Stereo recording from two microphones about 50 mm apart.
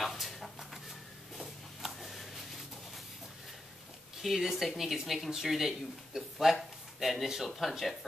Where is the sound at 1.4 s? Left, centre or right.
Centre.